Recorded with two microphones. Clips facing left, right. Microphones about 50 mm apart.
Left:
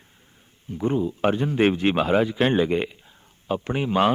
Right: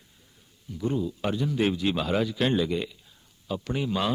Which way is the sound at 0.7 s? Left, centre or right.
Left.